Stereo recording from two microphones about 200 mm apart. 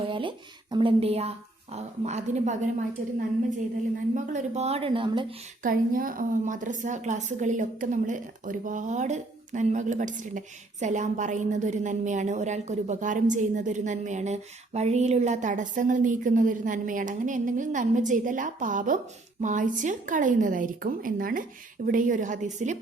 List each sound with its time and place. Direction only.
0.1 s a woman's voice: 25° right (ahead or behind)
4.1 s a woman's voice: 40° right (ahead or behind)
5.6 s a woman's voice: 45° right (ahead or behind)